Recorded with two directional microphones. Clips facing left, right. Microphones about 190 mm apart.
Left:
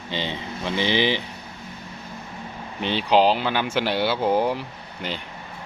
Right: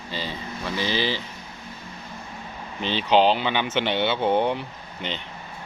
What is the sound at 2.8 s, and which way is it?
Speech, 5° left (ahead or behind).